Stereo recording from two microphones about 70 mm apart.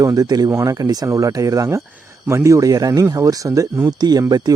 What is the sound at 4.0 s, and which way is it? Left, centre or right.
Speech, right.